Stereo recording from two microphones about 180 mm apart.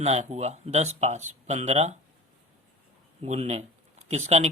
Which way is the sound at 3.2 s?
40° right (ahead or behind).